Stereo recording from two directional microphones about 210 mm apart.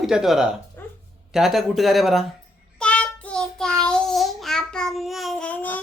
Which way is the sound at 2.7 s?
5° left (ahead or behind).